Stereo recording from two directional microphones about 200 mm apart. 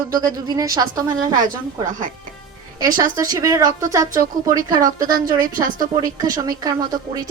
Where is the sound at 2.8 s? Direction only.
15° right (ahead or behind).